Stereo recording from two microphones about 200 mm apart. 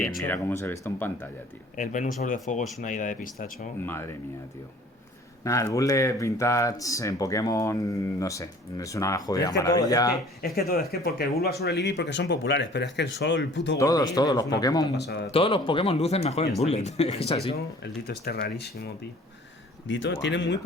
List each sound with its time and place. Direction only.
0.3 s speech: 10° left (ahead or behind)
1.7 s speech: 40° left (ahead or behind)
3.8 s speech: 10° left (ahead or behind)
5.4 s speech: 15° left (ahead or behind)
10.4 s speech: 50° left (ahead or behind)
13.7 s speech: 20° left (ahead or behind)
14.9 s speech: 55° left (ahead or behind)
15.3 s speech: 25° left (ahead or behind)
18.0 s speech: 50° left (ahead or behind)
19.9 s speech: 65° left (ahead or behind)